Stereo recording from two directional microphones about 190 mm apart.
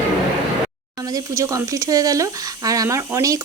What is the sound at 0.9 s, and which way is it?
Speech, 20° right (ahead or behind).